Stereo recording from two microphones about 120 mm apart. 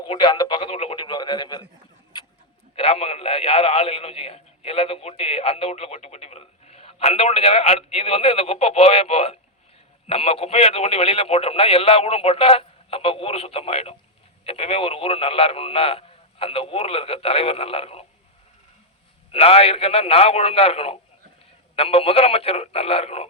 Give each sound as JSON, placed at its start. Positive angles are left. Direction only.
{"t": 0.1, "sound": "radio", "side_deg": 40}
{"t": 0.7, "sound": "radio", "side_deg": 55}
{"t": 2.7, "sound": "a sound", "side_deg": 55}
{"t": 10.1, "sound": "a man's voice", "side_deg": 55}
{"t": 19.3, "sound": "speech", "side_deg": 55}